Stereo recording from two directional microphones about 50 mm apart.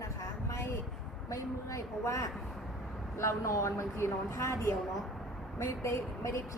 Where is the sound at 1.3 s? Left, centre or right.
Left.